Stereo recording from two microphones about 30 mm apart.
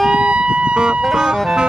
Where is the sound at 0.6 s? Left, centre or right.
Right.